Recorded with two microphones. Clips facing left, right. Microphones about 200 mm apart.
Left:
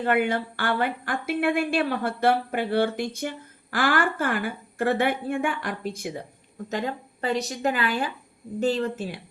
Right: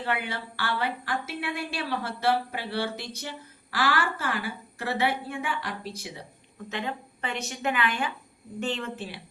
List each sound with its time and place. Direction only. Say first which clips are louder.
0.0 s speech: left 8 dB; 50° left (ahead or behind)
6.7 s a woman's voice: left 4 dB; 40° left (ahead or behind)